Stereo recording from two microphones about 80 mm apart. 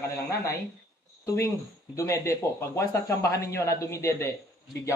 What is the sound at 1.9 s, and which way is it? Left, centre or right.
Speech, left.